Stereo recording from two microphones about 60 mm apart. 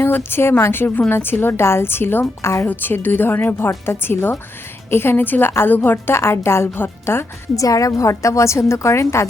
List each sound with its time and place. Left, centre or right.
0.0 s a woman's voice: left
2.6 s a woman's voice: left
6.1 s speech: left
7.5 s a woman's voice: left